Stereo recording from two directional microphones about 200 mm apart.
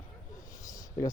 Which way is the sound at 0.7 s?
15° left (ahead or behind).